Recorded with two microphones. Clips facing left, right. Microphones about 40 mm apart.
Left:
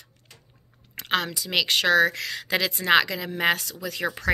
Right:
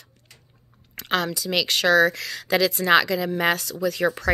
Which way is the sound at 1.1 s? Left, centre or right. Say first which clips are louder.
Right 2 dB; centre.